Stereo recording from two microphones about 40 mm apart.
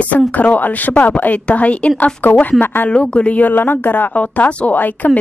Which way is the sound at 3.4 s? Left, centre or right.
Left.